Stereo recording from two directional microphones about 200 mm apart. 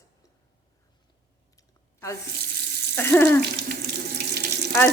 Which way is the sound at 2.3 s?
55° right (ahead or behind).